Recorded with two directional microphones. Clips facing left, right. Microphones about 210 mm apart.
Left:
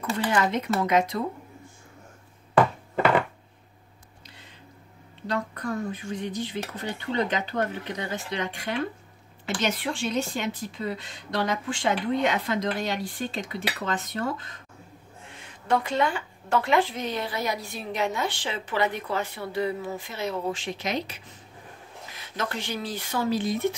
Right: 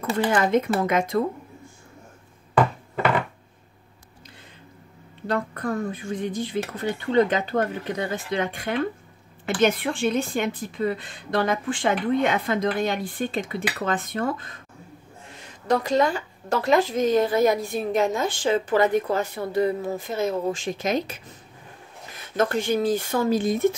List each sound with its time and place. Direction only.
0.2 s a woman's voice: 50° right (ahead or behind)
5.2 s a woman's voice: 50° right (ahead or behind)
15.4 s a woman's voice: 40° right (ahead or behind)